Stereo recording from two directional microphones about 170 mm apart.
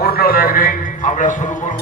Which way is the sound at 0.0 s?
65° left (ahead or behind).